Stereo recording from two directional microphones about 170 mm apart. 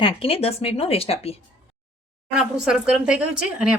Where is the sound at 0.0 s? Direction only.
35° left (ahead or behind).